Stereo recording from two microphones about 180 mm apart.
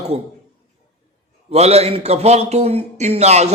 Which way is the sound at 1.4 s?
35° right (ahead or behind).